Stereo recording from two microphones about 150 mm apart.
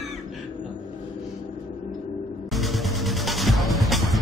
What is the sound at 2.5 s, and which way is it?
Music, centre (ahead or behind).